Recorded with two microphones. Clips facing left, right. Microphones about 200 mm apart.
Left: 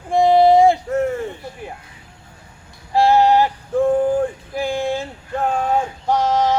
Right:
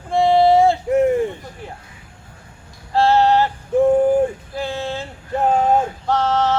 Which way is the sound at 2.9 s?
15° left (ahead or behind).